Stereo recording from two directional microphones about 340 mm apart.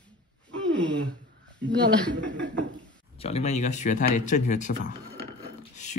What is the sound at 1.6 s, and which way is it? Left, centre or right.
Speech, right.